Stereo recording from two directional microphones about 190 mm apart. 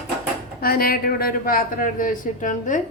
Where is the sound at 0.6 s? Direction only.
50° left (ahead or behind).